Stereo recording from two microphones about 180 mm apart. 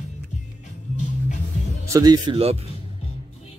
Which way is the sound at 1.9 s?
20° right (ahead or behind).